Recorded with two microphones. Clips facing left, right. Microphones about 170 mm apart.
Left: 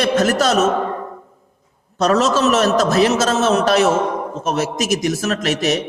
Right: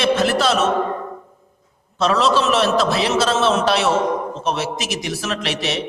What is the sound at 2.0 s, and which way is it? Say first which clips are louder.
A man's voice: left 2 dB; 45° left (ahead or behind).